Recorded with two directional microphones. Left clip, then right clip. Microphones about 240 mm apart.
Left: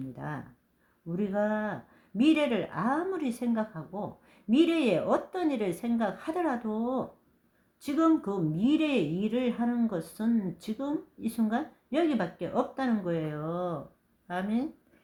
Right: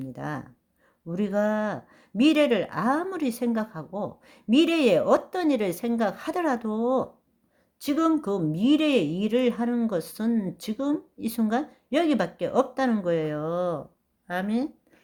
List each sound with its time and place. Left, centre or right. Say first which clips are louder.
0.2 s speech: right 5 dB; right